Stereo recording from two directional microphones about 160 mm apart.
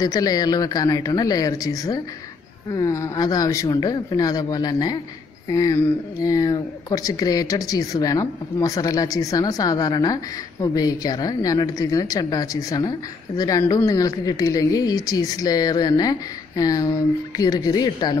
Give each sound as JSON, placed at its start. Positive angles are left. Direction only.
{"t": 0.0, "sound": "speech", "side_deg": 25}